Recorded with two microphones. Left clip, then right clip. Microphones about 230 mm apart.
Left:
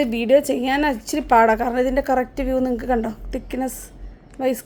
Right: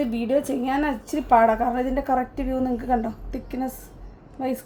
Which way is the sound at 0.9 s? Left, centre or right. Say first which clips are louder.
Left 2 dB; left.